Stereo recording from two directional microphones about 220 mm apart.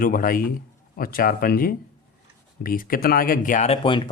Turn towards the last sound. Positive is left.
turn(degrees=20)  # may be behind; listen again after turning